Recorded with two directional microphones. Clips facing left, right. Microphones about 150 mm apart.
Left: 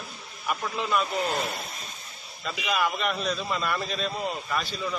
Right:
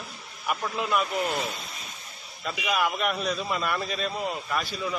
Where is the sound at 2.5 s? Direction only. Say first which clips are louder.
Even; 5° right (ahead or behind).